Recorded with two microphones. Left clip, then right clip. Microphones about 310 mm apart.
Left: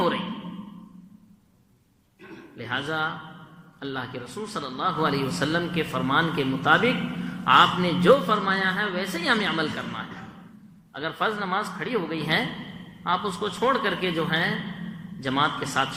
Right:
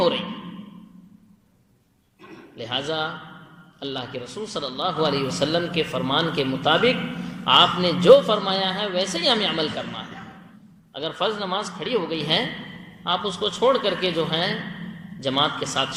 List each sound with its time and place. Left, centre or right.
2.6 s a man's voice: centre